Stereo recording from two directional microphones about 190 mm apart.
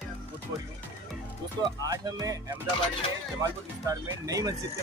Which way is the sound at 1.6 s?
20° right (ahead or behind).